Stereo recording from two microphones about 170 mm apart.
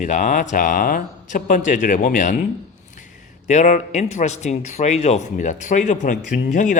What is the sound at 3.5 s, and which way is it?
Speech, 45° left (ahead or behind).